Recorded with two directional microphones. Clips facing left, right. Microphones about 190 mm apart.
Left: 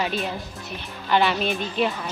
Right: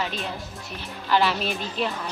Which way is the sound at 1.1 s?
Centre (ahead or behind).